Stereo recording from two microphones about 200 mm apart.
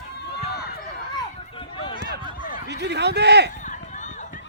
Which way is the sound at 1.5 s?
25° left (ahead or behind).